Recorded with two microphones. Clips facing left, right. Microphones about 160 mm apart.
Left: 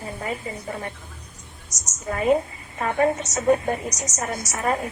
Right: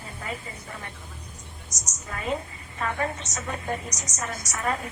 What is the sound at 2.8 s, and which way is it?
A woman's voice, 35° left (ahead or behind).